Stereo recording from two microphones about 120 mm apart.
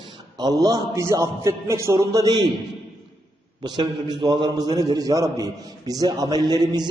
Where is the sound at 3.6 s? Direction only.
35° right (ahead or behind).